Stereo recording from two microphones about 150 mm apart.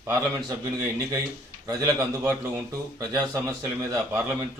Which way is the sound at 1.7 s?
25° right (ahead or behind).